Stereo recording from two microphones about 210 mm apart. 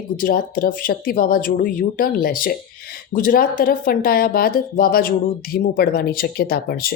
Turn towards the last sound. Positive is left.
turn(degrees=45)  # may be behind; listen again after turning